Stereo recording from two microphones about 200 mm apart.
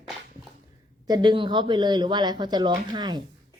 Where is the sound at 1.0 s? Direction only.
20° right (ahead or behind).